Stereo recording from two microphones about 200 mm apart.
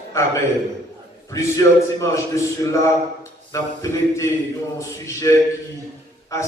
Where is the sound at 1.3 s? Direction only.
15° left (ahead or behind).